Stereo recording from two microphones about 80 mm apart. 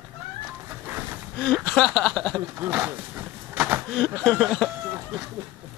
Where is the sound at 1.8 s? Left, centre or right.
Centre.